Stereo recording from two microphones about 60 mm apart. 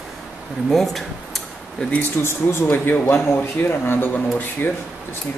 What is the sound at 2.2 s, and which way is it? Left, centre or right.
Speech, left.